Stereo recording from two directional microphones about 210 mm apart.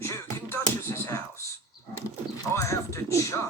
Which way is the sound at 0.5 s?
10° left (ahead or behind).